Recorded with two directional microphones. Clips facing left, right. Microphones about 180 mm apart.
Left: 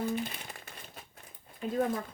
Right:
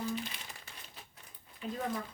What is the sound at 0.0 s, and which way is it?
Crumpling, 55° left (ahead or behind).